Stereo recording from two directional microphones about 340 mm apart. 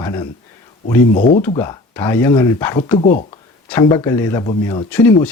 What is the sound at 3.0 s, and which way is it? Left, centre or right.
Speech, left.